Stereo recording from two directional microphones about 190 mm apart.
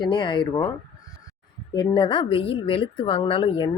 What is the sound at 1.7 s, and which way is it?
Speech, 20° left (ahead or behind).